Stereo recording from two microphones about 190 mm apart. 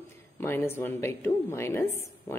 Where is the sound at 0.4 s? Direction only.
10° left (ahead or behind).